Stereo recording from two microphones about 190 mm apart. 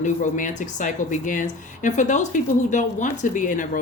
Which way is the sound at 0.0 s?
40° left (ahead or behind).